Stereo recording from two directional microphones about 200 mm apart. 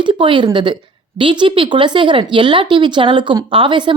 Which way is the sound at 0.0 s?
25° right (ahead or behind).